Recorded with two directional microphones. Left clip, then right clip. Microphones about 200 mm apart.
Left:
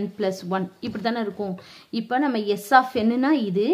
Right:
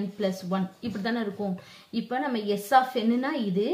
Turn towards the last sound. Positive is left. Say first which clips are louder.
# left 6 dB
turn(degrees=45)  # may be behind; listen again after turning